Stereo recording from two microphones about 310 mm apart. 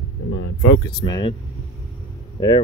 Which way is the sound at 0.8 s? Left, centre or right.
Centre.